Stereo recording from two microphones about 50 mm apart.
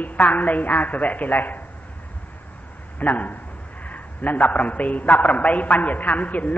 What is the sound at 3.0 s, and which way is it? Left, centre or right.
A woman's voice, left.